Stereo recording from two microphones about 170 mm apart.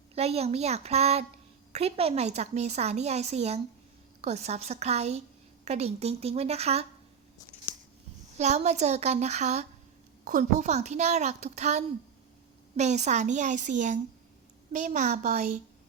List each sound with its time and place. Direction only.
0.1 s a woman's voice: 35° right (ahead or behind)
8.4 s a woman's voice: 40° right (ahead or behind)